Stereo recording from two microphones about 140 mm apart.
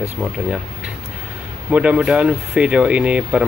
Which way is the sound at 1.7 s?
10° right (ahead or behind).